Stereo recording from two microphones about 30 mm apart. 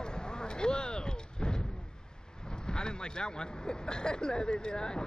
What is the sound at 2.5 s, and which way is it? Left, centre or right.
Speech, left.